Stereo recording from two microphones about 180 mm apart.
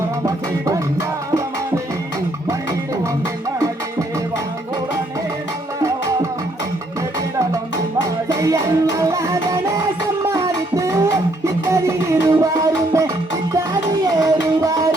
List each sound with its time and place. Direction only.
0.3 s music: 20° right (ahead or behind)
8.3 s music: 20° right (ahead or behind)